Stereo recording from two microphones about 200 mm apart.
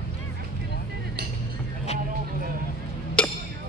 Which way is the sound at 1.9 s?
35° left (ahead or behind).